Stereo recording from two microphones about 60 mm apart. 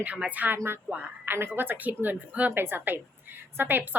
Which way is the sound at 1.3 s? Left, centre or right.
Right.